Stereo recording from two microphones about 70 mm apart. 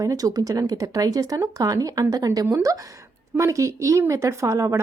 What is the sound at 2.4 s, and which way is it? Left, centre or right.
A woman's voice, right.